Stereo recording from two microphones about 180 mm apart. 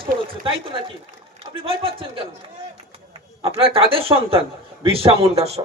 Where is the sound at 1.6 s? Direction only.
30° right (ahead or behind).